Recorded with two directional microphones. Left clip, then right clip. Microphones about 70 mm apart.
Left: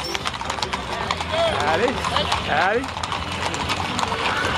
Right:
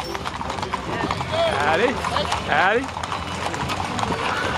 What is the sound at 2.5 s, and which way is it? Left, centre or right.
Boat, right.